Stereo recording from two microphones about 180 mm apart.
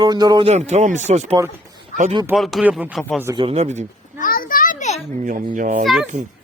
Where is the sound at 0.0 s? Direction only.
20° right (ahead or behind).